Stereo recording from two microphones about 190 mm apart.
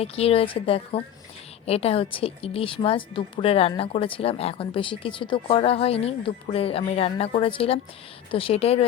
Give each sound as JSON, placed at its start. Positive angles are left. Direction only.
{"t": 0.0, "sound": "a woman's voice", "side_deg": 30}